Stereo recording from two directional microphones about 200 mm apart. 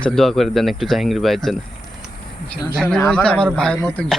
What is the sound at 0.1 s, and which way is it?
Speech, centre (ahead or behind).